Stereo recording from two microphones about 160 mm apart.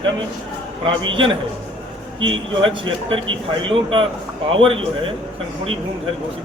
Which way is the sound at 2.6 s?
30° right (ahead or behind).